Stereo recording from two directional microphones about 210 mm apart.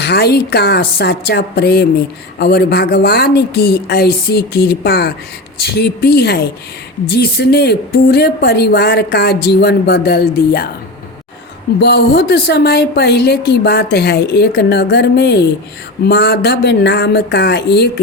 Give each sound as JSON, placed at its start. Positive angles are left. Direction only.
{"t": 0.0, "sound": "speech", "side_deg": 50}
{"t": 11.8, "sound": "speech", "side_deg": 50}